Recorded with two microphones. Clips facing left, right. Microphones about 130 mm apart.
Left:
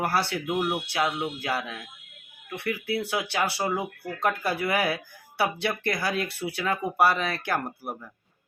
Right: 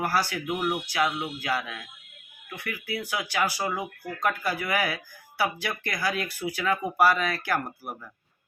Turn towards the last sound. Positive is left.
turn(degrees=25)  # may be behind; listen again after turning